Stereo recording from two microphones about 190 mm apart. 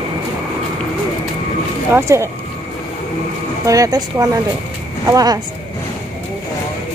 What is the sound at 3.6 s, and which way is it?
Speech, 15° right (ahead or behind).